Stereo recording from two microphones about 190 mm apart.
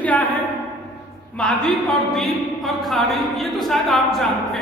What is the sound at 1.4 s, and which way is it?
A man's voice, 5° left (ahead or behind).